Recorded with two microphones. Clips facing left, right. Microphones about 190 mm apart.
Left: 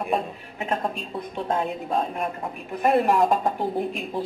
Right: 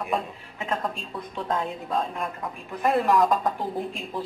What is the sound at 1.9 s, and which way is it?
A woman's voice, 25° left (ahead or behind).